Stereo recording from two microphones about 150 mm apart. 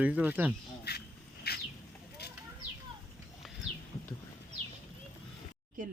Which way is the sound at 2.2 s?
90° left.